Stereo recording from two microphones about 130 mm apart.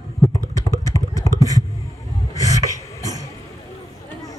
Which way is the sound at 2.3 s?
25° right (ahead or behind).